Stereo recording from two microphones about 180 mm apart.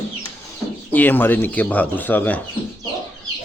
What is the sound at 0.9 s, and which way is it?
Speech, 10° left (ahead or behind).